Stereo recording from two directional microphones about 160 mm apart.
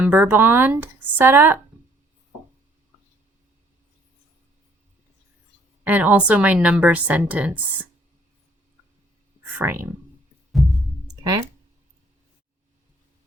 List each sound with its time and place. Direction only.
0.0 s a woman's voice: 10° right (ahead or behind)
5.8 s a woman's voice: 10° right (ahead or behind)
9.6 s a woman's voice: 15° right (ahead or behind)
10.5 s heart murmur: centre (ahead or behind)
11.1 s music: 25° right (ahead or behind)